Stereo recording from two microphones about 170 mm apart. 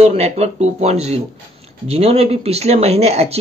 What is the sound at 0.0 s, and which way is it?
Speech, 35° right (ahead or behind).